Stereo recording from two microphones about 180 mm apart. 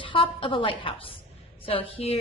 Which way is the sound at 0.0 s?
30° left (ahead or behind).